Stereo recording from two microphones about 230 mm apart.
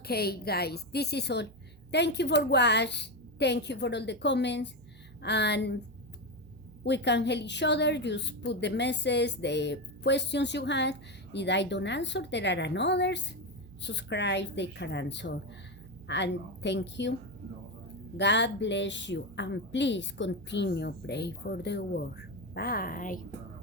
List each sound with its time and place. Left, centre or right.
0.0 s a woman's voice: left
6.8 s a woman's voice: left
18.2 s a woman's voice: left